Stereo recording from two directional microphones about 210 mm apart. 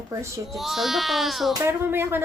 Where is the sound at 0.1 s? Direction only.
15° right (ahead or behind).